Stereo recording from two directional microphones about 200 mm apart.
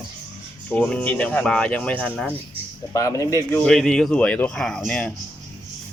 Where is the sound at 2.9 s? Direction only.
15° left (ahead or behind).